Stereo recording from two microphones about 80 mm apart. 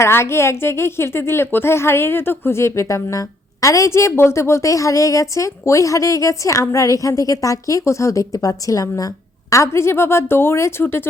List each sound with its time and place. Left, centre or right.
0.0 s a woman's voice: left
9.5 s a woman's voice: left